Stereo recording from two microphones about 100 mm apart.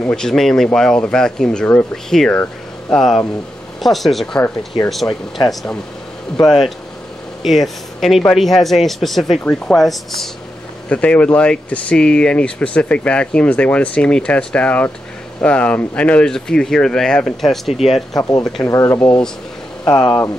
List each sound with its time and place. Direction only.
0.1 s speech: 5° left (ahead or behind)
2.3 s speech: 15° left (ahead or behind)
3.8 s speech: centre (ahead or behind)
6.4 s speech: 5° left (ahead or behind)
9.4 s speech: 15° left (ahead or behind)
9.8 s speech: centre (ahead or behind)
10.9 s speech: 10° left (ahead or behind)
18.1 s speech: 40° left (ahead or behind)
18.6 s speech: 30° left (ahead or behind)
19.0 s speech: 10° left (ahead or behind)
19.8 s speech: 35° left (ahead or behind)